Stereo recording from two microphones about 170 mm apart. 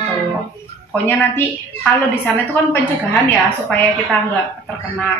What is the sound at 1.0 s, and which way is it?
A woman's voice, 10° left (ahead or behind).